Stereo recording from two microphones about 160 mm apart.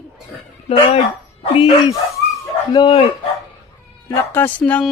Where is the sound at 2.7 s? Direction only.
35° left (ahead or behind).